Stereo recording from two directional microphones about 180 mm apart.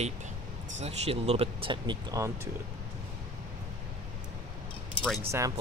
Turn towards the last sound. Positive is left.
turn(degrees=-15)  # may be behind; listen again after turning